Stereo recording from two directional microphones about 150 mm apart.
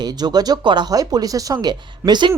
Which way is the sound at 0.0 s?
25° right (ahead or behind).